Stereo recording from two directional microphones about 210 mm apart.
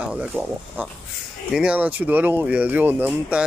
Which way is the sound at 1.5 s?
5° right (ahead or behind).